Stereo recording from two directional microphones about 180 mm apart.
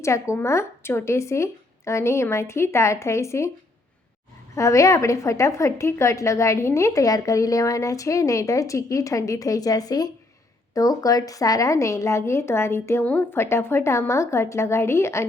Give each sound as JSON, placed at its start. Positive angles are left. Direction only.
{"t": 0.0, "sound": "a woman's voice", "side_deg": 15}
{"t": 4.5, "sound": "a woman's voice", "side_deg": 15}